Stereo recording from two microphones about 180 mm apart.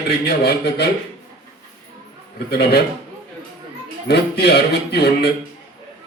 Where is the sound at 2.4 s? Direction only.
65° left (ahead or behind).